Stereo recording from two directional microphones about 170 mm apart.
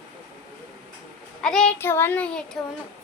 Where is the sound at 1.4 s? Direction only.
5° left (ahead or behind).